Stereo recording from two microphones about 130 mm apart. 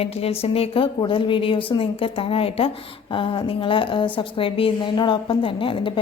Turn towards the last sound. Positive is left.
turn(degrees=40)  # may be behind; listen again after turning